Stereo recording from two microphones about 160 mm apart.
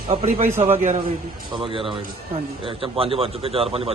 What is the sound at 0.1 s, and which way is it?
Speech, 40° right (ahead or behind).